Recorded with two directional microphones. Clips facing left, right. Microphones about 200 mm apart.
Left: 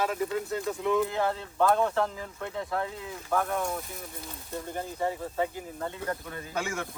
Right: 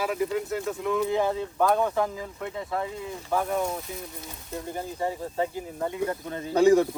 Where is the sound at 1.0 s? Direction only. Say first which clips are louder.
Right 3 dB; 15° right (ahead or behind).